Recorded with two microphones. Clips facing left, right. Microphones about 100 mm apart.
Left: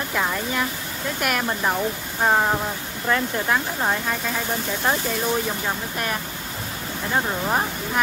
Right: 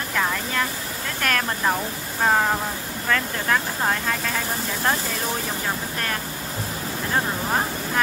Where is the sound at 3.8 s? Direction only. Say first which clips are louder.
Even; 5° left (ahead or behind).